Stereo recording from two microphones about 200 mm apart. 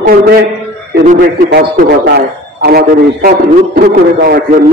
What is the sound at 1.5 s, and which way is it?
A man's voice, 55° right (ahead or behind).